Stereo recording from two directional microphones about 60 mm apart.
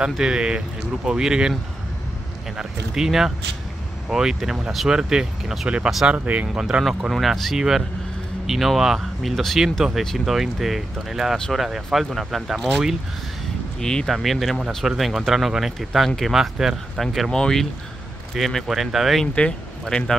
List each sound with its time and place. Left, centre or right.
0.0 s speech: centre
2.5 s speech: centre
6.0 s speech: right
7.1 s speech: centre
13.7 s speech: centre
14.1 s speech: centre
19.3 s speech: centre